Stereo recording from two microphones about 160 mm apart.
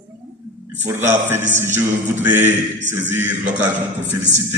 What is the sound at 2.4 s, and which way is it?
Speech, 50° right (ahead or behind).